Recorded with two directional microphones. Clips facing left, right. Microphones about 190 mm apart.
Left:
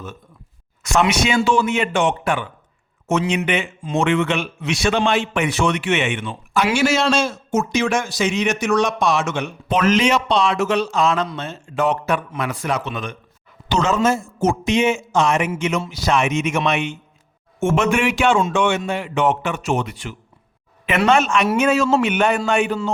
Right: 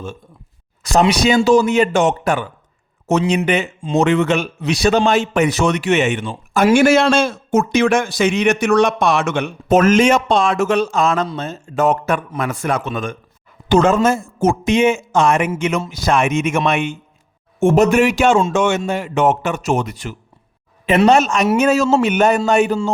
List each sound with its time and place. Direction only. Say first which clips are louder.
0.8 s a man's voice: right 3 dB; 35° right (ahead or behind); by 17.0 s 50° right (ahead or behind)
17.6 s a man's voice: right 6 dB; 35° right (ahead or behind)